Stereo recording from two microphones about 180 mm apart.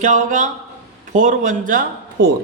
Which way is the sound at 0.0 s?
45° right (ahead or behind).